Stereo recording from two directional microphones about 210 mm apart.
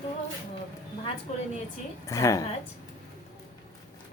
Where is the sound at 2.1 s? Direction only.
15° left (ahead or behind).